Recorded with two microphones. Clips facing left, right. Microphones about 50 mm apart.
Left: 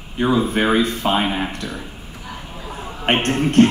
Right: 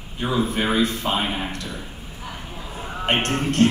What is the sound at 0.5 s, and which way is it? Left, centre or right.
A man's voice, left.